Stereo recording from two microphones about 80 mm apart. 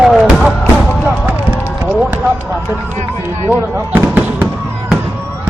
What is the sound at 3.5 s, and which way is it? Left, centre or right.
Speech, right.